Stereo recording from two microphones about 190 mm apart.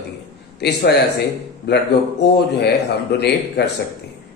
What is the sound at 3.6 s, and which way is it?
Speech, 65° left (ahead or behind).